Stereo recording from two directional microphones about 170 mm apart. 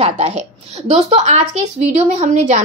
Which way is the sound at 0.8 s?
40° right (ahead or behind).